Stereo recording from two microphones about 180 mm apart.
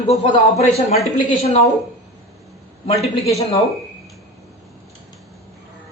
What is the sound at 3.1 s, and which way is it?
Speech, 35° left (ahead or behind).